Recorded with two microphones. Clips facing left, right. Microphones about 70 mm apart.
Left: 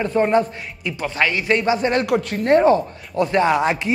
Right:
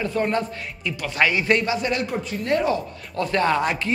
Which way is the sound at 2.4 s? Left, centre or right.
Left.